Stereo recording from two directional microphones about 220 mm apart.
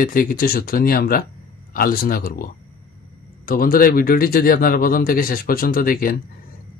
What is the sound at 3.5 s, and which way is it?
Speech, 40° left (ahead or behind).